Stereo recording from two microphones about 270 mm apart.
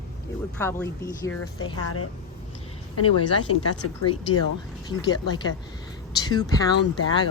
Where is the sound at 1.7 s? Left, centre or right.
Left.